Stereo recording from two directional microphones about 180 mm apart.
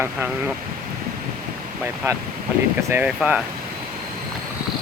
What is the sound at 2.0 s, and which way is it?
Speech, 15° right (ahead or behind).